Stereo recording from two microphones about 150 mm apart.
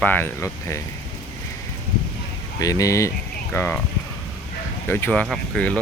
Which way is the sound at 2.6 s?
20° left (ahead or behind).